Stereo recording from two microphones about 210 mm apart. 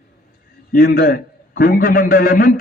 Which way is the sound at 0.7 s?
45° left (ahead or behind).